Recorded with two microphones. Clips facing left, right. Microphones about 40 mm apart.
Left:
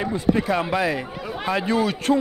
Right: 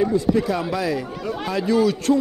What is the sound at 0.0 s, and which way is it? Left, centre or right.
A man's voice, left.